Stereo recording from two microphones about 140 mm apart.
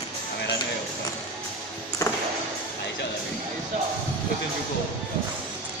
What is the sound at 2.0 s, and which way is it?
Music, 25° left (ahead or behind).